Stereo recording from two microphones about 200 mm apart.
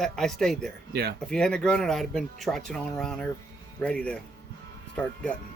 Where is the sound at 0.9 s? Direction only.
50° right (ahead or behind).